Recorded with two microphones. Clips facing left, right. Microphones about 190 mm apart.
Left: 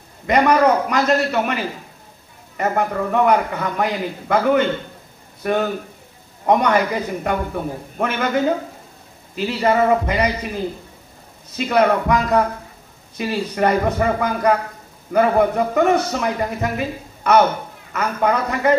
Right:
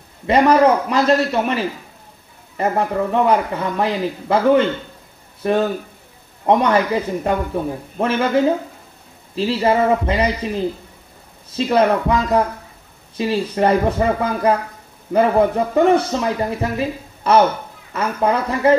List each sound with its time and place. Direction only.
0.3 s a man's voice: 30° right (ahead or behind)
9.3 s a man's voice: 30° right (ahead or behind)
11.5 s a man's voice: 30° right (ahead or behind)